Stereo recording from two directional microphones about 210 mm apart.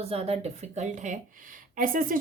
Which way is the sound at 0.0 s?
30° right (ahead or behind).